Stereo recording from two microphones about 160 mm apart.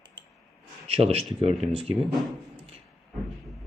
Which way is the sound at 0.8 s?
40° right (ahead or behind).